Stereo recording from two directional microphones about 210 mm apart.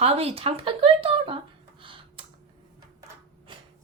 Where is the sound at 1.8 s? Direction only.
25° right (ahead or behind).